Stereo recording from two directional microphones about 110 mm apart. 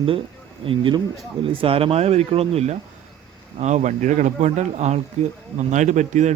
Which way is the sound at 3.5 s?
90° right.